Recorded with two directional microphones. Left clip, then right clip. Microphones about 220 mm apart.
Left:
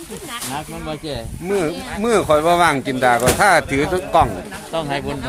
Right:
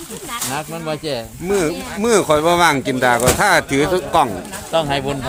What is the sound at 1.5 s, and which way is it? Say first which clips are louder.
Speech: right 2 dB; 10° right (ahead or behind).